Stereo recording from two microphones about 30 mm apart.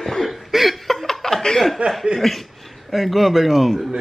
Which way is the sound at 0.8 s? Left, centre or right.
Centre.